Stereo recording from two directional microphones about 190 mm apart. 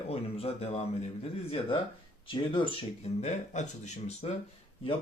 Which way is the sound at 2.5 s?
30° left (ahead or behind).